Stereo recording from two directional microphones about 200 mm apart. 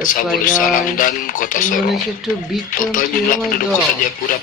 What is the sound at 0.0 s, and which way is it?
Speech, 40° left (ahead or behind).